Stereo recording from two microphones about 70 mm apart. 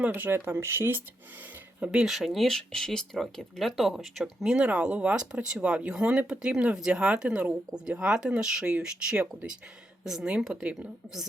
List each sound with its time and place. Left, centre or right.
0.1 s speech: right
1.8 s speech: centre
2.0 s speech: centre
4.6 s speech: centre